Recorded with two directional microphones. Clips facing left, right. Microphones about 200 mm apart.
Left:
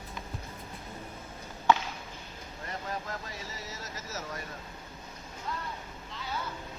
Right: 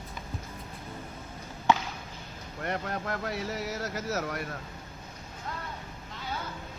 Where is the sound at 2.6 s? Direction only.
65° right (ahead or behind).